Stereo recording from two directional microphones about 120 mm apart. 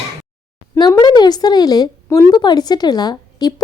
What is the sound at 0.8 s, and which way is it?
Speech, 35° left (ahead or behind).